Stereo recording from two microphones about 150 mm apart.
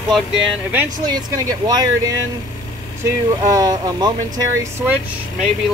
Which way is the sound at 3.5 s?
25° right (ahead or behind).